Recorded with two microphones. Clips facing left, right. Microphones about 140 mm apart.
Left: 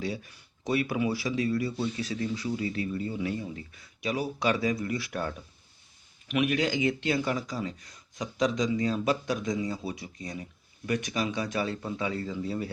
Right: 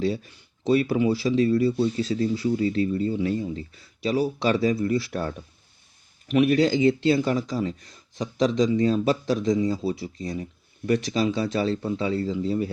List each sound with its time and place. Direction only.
0.0 s speech: 30° right (ahead or behind)